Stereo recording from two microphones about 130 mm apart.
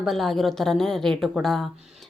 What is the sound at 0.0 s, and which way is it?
A woman's voice, centre (ahead or behind).